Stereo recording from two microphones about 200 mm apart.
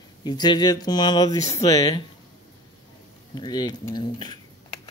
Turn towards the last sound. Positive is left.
turn(degrees=20)  # may be behind; listen again after turning